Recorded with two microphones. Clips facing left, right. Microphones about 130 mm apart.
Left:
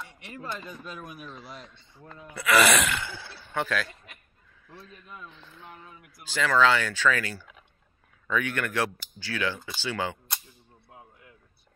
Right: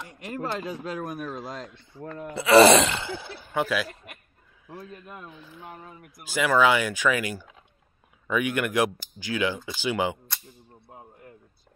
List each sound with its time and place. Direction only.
0.1 s a sound: 45° right (ahead or behind)
0.4 s speech: 70° right (ahead or behind)
1.0 s speech: 45° right (ahead or behind)
1.3 s a man's voice: 90° right
2.3 s speech: 30° right (ahead or behind)
3.5 s speech: 10° right (ahead or behind)
4.9 s a man's voice: 55° right (ahead or behind)
5.3 s speech: 10° right (ahead or behind)
5.7 s speech: 35° right (ahead or behind)
6.2 s speech: 10° right (ahead or behind)
10.9 s speech: 45° right (ahead or behind)